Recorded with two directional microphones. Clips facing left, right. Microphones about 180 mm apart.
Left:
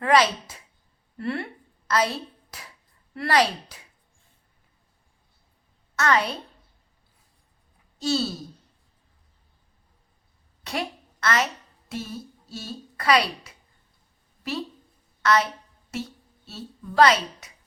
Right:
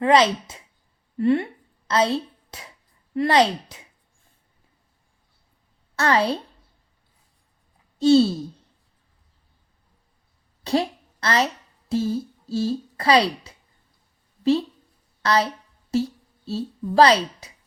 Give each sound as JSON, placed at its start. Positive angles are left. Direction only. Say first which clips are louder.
{"t": 0.0, "sound": "a woman's voice", "louder": "right 3 dB", "side_deg": -25}
{"t": 6.0, "sound": "speech", "louder": "right 3 dB", "side_deg": -30}
{"t": 7.9, "sound": "speech", "louder": "right 10 dB", "side_deg": -25}
{"t": 10.6, "sound": "a sound", "louder": "right 8 dB", "side_deg": -30}
{"t": 11.9, "sound": "a woman's voice", "louder": "right 11 dB", "side_deg": -30}
{"t": 15.2, "sound": "a woman's voice", "louder": "right 1 dB", "side_deg": -30}